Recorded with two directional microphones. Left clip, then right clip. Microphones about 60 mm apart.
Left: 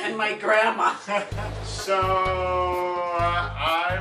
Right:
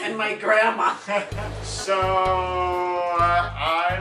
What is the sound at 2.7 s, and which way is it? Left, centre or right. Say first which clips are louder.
Music: right 2 dB; centre.